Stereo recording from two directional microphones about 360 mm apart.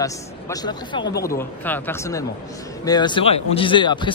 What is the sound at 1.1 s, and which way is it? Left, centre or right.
Speech, left.